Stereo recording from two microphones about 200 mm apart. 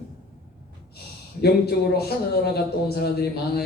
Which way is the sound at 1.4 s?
50° left (ahead or behind).